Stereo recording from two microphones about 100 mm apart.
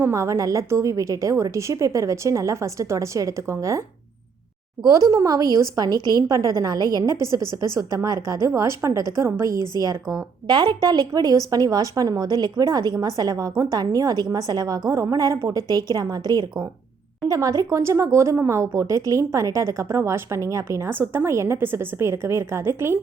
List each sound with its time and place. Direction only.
0.0 s a woman's voice: 30° right (ahead or behind)